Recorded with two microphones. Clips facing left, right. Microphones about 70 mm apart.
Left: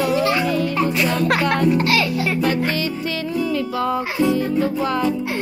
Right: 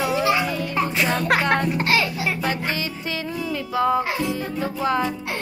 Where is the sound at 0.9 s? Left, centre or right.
Right.